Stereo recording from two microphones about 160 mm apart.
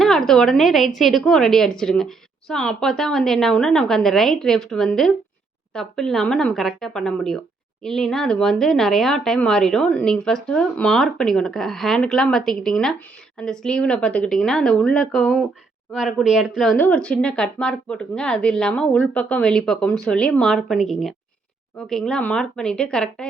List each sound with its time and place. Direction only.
0.0 s a woman's voice: centre (ahead or behind)
16.7 s a woman's voice: 10° left (ahead or behind)